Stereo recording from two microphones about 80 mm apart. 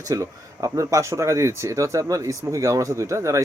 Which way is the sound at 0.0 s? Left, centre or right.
Right.